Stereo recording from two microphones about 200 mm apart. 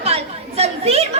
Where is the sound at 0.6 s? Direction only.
30° right (ahead or behind).